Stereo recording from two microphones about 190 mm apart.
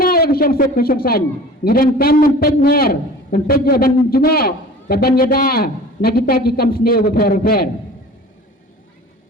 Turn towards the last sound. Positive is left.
turn(degrees=50)  # may be behind; listen again after turning